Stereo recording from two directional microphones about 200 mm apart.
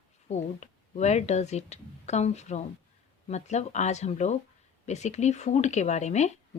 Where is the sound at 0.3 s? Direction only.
35° left (ahead or behind).